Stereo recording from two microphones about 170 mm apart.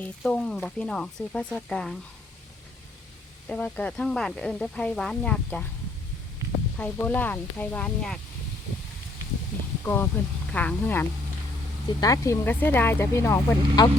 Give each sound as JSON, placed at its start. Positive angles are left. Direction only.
{"t": 0.0, "sound": "speech", "side_deg": 5}
{"t": 3.5, "sound": "speech", "side_deg": 10}
{"t": 6.7, "sound": "speech", "side_deg": 10}
{"t": 9.8, "sound": "speech", "side_deg": 15}